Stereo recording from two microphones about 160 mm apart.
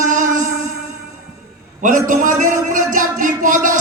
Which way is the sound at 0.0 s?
55° right (ahead or behind).